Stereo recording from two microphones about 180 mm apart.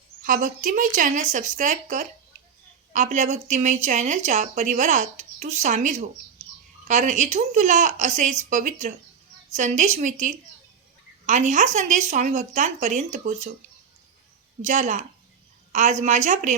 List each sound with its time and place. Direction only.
0.3 s a woman's voice: 45° right (ahead or behind)
14.6 s a woman's voice: 40° right (ahead or behind)